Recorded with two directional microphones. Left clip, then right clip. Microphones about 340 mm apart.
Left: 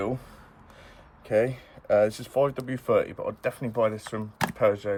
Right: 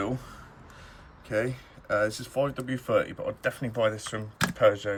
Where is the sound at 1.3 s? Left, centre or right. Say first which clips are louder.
Left 5 dB; centre.